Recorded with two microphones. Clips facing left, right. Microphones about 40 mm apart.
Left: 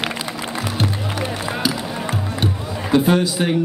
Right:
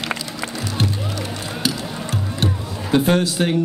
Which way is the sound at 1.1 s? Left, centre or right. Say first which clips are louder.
Left 4 dB; left.